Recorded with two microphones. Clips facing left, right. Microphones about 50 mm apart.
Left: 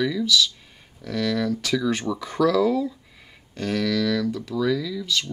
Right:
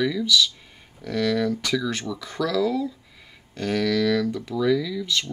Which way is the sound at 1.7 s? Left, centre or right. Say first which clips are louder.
Left 2 dB; centre.